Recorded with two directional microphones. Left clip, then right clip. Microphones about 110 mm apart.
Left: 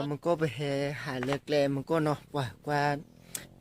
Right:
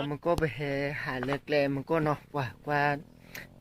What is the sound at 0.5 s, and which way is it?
Speech, 45° left (ahead or behind).